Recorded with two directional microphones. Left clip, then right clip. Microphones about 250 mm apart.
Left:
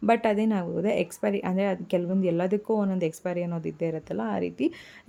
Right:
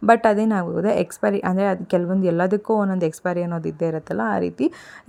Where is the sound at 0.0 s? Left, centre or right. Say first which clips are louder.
Right 7 dB; centre.